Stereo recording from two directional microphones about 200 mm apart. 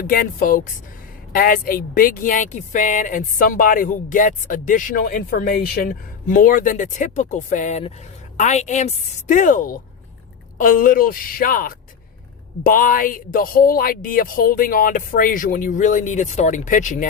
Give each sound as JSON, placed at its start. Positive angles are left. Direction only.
{"t": 0.0, "sound": "speech", "side_deg": 45}